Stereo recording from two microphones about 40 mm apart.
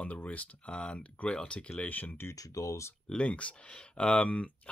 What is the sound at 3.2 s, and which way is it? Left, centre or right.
Speech, left.